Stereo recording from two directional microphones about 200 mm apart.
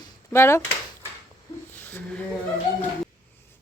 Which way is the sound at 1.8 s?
10° left (ahead or behind).